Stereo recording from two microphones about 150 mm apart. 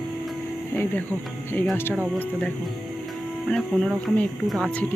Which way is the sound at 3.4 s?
5° left (ahead or behind).